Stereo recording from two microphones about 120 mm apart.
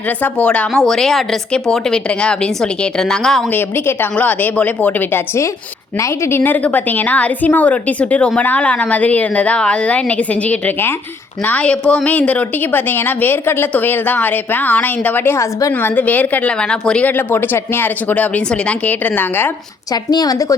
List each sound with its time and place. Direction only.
0.2 s a woman's voice: 10° left (ahead or behind)
3.5 s a woman's voice: 15° left (ahead or behind)
19.9 s a woman's voice: 35° left (ahead or behind)